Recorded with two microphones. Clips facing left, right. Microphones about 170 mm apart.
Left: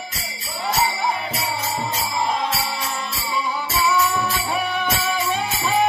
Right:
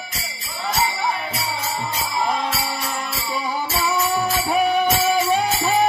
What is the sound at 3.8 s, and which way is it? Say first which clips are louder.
Music: left 1 dB; 40° right (ahead or behind).